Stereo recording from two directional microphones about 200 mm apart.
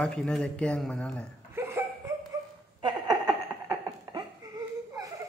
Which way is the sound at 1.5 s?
10° right (ahead or behind).